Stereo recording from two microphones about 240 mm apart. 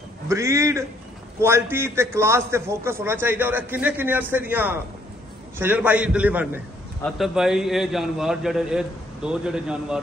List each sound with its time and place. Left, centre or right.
0.3 s a man's voice: centre